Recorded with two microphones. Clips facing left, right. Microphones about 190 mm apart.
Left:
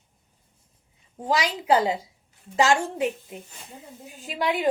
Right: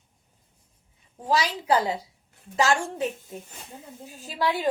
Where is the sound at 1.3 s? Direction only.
15° left (ahead or behind).